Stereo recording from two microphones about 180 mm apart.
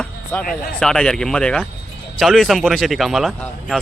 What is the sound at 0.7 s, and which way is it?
Speech, 5° left (ahead or behind).